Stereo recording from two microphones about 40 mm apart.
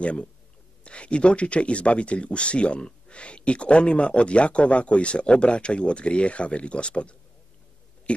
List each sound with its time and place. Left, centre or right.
0.0 s speech: left